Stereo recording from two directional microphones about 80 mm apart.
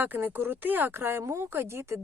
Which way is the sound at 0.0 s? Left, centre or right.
Right.